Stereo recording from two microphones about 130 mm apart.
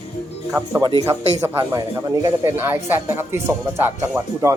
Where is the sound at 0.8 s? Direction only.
30° right (ahead or behind).